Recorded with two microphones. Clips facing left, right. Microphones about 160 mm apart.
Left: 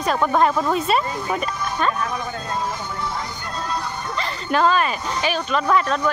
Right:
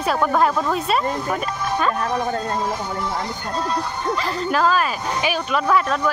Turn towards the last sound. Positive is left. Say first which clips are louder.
# even
turn(degrees=-5)  # may be behind; listen again after turning